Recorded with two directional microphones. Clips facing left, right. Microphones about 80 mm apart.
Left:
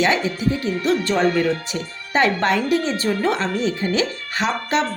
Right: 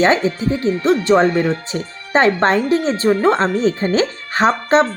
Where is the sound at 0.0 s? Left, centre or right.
Right.